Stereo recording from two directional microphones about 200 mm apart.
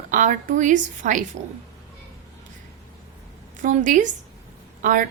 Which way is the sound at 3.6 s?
40° right (ahead or behind).